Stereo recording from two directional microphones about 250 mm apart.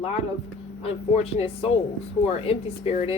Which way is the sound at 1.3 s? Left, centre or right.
Left.